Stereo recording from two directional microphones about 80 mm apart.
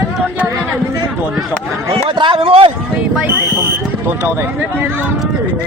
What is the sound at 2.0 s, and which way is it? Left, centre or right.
Speech, right.